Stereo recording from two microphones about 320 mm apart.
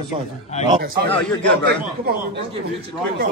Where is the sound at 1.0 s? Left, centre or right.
Centre.